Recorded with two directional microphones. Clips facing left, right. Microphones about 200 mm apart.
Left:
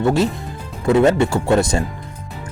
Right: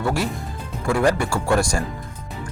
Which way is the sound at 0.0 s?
25° left (ahead or behind).